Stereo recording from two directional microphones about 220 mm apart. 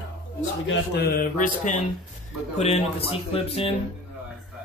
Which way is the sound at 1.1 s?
35° left (ahead or behind).